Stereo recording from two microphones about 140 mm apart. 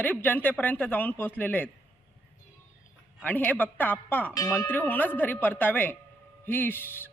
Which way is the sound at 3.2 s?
15° left (ahead or behind).